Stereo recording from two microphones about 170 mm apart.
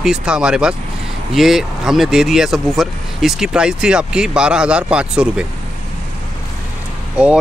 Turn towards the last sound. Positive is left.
turn(degrees=-5)  # may be behind; listen again after turning